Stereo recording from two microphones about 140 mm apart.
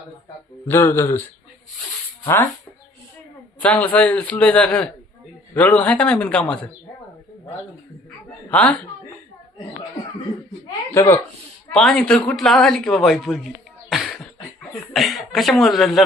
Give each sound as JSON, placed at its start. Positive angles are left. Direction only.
{"t": 0.7, "sound": "a man's voice", "side_deg": 15}
{"t": 2.2, "sound": "speech", "side_deg": 20}
{"t": 3.6, "sound": "a man's voice", "side_deg": 10}
{"t": 8.4, "sound": "a man's voice", "side_deg": 10}
{"t": 10.9, "sound": "speech", "side_deg": 20}
{"t": 11.7, "sound": "speech", "side_deg": 5}
{"t": 13.9, "sound": "beatboxing", "side_deg": 0}
{"t": 14.9, "sound": "speech", "side_deg": 0}